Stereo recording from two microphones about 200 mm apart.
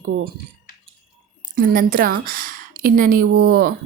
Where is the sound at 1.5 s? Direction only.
45° right (ahead or behind).